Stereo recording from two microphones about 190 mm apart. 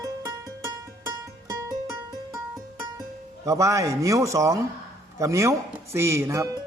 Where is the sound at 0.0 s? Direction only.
20° right (ahead or behind).